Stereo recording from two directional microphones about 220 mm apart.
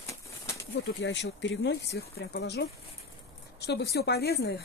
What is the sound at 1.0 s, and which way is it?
Speech, 55° left (ahead or behind).